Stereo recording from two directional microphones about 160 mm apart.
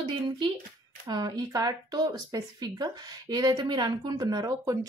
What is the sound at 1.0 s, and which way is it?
Speech, 25° right (ahead or behind).